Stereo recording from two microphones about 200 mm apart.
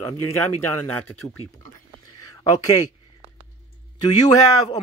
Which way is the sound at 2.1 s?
20° left (ahead or behind).